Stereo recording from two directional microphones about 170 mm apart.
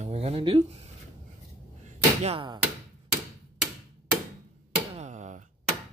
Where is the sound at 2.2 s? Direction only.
35° right (ahead or behind).